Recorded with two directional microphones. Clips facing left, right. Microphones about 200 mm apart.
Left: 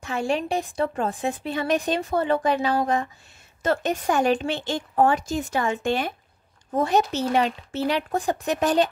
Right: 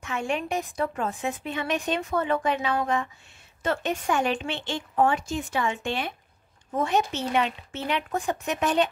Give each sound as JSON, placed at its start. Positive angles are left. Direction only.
{"t": 0.0, "sound": "speech", "side_deg": 35}